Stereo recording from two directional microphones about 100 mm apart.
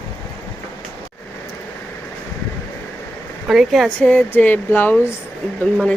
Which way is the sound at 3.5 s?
Centre (ahead or behind).